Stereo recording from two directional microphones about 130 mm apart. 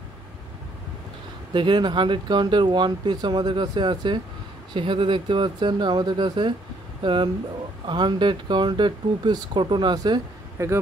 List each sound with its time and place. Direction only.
1.5 s speech: 40° right (ahead or behind)
10.6 s a man's voice: 20° right (ahead or behind)